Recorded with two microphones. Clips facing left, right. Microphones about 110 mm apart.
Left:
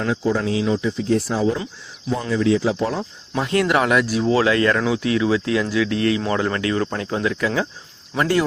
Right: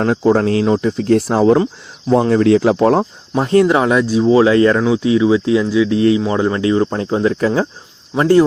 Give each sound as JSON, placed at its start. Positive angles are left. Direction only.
{"t": 0.0, "sound": "speech", "side_deg": -55}
{"t": 3.3, "sound": "speech", "side_deg": -30}